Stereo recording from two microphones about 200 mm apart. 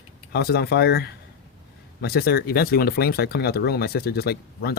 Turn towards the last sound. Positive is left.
turn(degrees=50)  # may be behind; listen again after turning